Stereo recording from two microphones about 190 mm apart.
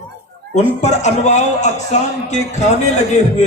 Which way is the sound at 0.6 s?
35° left (ahead or behind).